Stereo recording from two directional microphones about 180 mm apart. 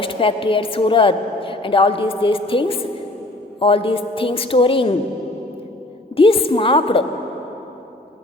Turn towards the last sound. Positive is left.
turn(degrees=30)  # may be behind; listen again after turning